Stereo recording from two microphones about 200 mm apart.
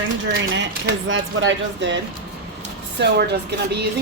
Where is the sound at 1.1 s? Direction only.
70° right (ahead or behind).